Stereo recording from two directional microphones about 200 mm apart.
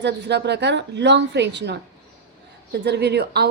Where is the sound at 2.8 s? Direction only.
55° right (ahead or behind).